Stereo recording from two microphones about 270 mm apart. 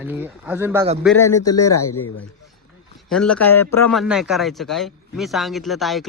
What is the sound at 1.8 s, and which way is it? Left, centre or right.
Speech, left.